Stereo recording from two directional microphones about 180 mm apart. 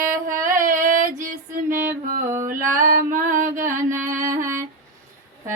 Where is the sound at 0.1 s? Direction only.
50° right (ahead or behind).